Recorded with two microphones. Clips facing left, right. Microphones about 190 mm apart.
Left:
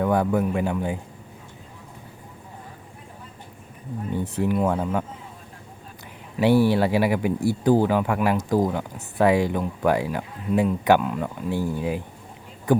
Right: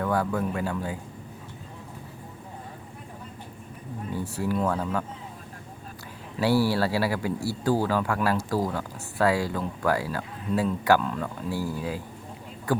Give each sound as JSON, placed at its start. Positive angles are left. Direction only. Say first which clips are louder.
{"t": 0.0, "sound": "a man's voice", "louder": "left 5 dB", "side_deg": 20}
{"t": 4.1, "sound": "a man's voice", "louder": "left 4 dB", "side_deg": 20}
{"t": 6.4, "sound": "a man's voice", "louder": "left 5 dB", "side_deg": 20}